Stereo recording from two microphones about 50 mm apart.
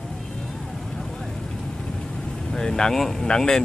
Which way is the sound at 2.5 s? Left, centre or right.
Centre.